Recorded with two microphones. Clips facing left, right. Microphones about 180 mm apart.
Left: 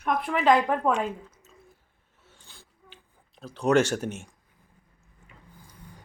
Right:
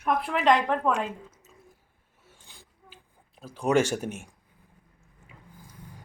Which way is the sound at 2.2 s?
10° right (ahead or behind).